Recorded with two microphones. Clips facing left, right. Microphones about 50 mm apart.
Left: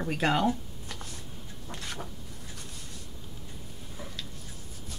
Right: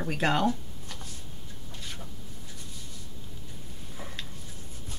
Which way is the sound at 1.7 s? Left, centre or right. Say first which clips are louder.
Left 5 dB; left.